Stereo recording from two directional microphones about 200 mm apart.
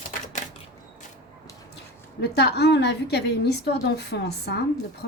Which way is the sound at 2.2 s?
55° left (ahead or behind).